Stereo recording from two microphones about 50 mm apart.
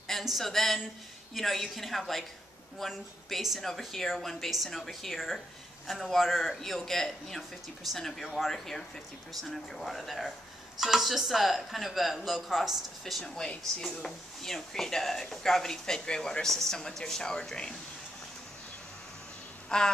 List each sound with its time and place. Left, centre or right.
0.2 s a woman's voice: centre
13.1 s speech: centre
19.7 s speech: centre